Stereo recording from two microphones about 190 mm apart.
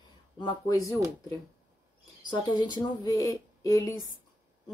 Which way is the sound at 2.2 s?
25° left (ahead or behind).